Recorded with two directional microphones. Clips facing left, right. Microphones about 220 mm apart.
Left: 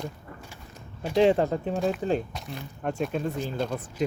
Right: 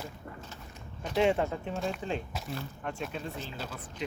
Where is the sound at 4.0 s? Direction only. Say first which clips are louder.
Left 9 dB; 45° left (ahead or behind).